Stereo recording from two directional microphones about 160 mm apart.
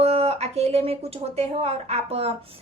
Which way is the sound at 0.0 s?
40° right (ahead or behind).